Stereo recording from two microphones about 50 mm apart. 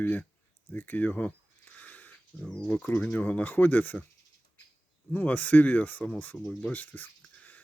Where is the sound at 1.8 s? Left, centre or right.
Left.